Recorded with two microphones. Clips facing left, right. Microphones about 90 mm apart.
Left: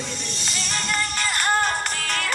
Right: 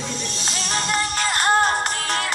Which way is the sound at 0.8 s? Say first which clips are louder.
Right 3 dB; 25° right (ahead or behind).